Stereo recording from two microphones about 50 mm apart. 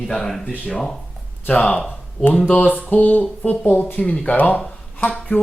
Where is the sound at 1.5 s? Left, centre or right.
Left.